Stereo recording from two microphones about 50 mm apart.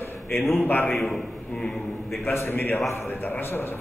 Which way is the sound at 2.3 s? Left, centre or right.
Left.